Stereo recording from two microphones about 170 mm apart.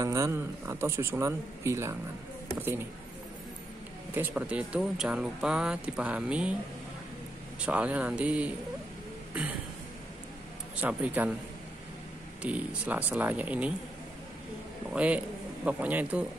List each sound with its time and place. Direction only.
0.0 s speech: 20° right (ahead or behind)
4.1 s speech: 10° right (ahead or behind)
7.6 s speech: 10° right (ahead or behind)
10.8 s speech: 10° right (ahead or behind)
12.4 s speech: 10° right (ahead or behind)
14.9 s a man's voice: 5° right (ahead or behind)